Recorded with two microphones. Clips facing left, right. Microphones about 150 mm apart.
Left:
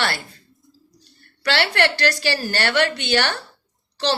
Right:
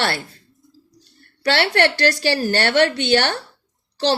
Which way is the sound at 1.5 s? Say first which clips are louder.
Right 3 dB; 45° right (ahead or behind).